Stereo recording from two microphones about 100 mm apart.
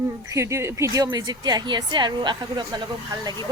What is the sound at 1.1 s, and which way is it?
A woman's voice, 45° right (ahead or behind).